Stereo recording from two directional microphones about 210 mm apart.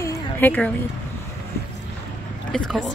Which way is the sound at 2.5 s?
5° left (ahead or behind).